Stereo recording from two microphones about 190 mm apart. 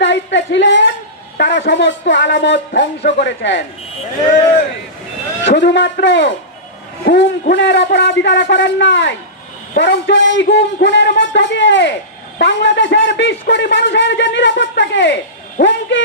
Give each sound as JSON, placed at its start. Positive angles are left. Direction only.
{"t": 0.0, "sound": "speech", "side_deg": 70}
{"t": 5.5, "sound": "speech", "side_deg": 70}